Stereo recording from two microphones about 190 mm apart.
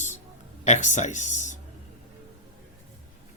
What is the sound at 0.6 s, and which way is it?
Speech, 40° left (ahead or behind).